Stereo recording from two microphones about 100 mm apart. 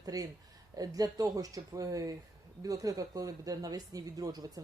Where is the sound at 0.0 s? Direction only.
40° right (ahead or behind).